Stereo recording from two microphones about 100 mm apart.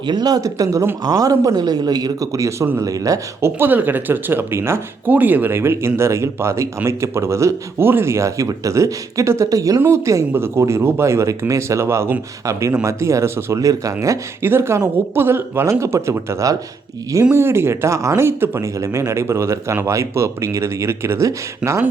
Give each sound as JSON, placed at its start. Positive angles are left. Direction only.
{"t": 0.0, "sound": "a man's voice", "side_deg": -45}
{"t": 3.4, "sound": "a man's voice", "side_deg": -20}
{"t": 14.4, "sound": "speech", "side_deg": -25}